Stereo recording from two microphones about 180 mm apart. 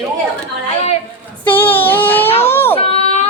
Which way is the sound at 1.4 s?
10° left (ahead or behind).